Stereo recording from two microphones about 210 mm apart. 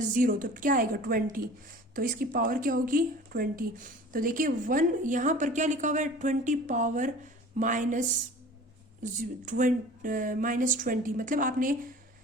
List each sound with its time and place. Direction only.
0.2 s a woman's voice: 40° right (ahead or behind)
9.1 s a woman's voice: 35° right (ahead or behind)